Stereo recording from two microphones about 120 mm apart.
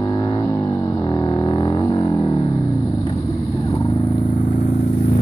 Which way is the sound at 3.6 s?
30° left (ahead or behind).